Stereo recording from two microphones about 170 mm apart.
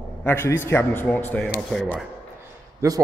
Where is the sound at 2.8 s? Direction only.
20° right (ahead or behind).